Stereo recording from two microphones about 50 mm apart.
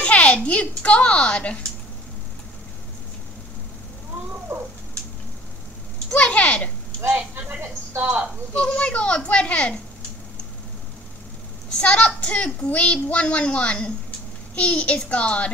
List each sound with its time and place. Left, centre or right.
0.0 s a woman's voice: left
4.5 s a sound: right
6.1 s a child's voice: left
7.3 s a sound: right
8.5 s a child's voice: left
11.8 s a child's voice: left